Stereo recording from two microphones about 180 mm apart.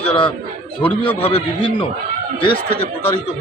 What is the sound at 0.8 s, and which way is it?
Speech, 10° left (ahead or behind).